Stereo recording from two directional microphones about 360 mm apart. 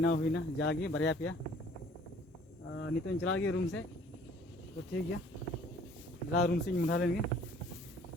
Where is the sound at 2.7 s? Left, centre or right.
Left.